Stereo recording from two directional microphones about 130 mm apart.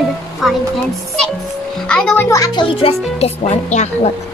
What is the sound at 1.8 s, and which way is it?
Speech, 5° left (ahead or behind).